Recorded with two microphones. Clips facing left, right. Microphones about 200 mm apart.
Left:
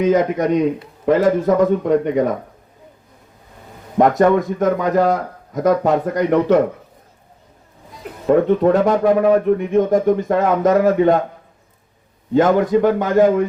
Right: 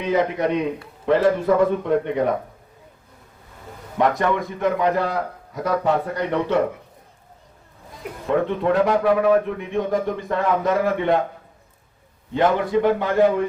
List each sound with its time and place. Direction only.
0.0 s speech: 45° left (ahead or behind)
3.9 s speech: 45° left (ahead or behind)
8.4 s speech: 45° left (ahead or behind)
12.3 s speech: 45° left (ahead or behind)